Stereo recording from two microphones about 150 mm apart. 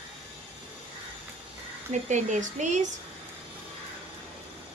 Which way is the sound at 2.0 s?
55° right (ahead or behind).